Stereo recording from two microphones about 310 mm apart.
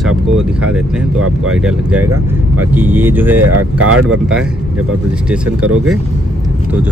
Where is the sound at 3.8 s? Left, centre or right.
Right.